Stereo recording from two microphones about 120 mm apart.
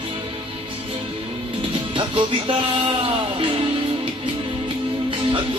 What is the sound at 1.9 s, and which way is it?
Music, 45° right (ahead or behind).